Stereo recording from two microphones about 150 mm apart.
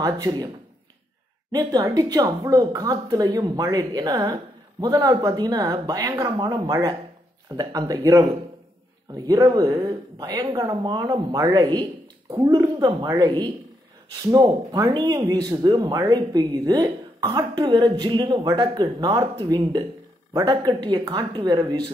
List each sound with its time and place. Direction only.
0.0 s speech: 25° right (ahead or behind)
1.5 s speech: 25° right (ahead or behind)